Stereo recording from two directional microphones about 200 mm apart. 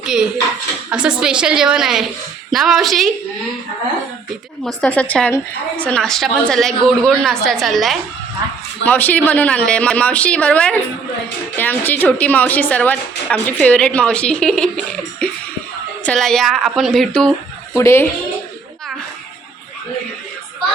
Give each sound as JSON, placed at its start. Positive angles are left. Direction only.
{"t": 0.0, "sound": "a woman's voice", "side_deg": -5}
{"t": 4.6, "sound": "a woman's voice", "side_deg": 5}
{"t": 16.0, "sound": "a woman's voice", "side_deg": 5}
{"t": 17.7, "sound": "a woman's voice", "side_deg": 10}